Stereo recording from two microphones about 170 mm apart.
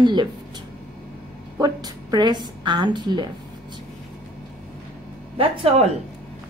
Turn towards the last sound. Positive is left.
turn(degrees=-35)  # may be behind; listen again after turning